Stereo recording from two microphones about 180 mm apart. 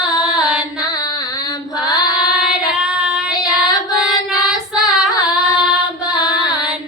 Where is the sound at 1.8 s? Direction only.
20° left (ahead or behind).